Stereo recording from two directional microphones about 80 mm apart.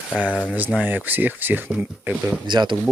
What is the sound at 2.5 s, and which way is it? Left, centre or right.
Speech, right.